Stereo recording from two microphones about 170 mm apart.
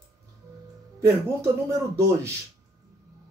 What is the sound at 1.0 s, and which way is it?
Speech, 15° right (ahead or behind).